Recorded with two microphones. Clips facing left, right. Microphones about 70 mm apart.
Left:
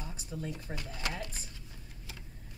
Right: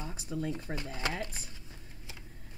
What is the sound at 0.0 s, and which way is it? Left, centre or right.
Speech, right.